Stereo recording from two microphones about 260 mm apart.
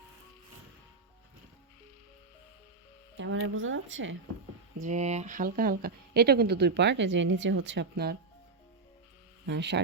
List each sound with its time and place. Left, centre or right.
3.2 s speech: right
4.8 s speech: right
9.5 s speech: right